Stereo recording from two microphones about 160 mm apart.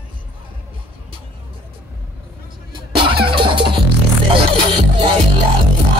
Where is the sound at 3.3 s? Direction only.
30° right (ahead or behind).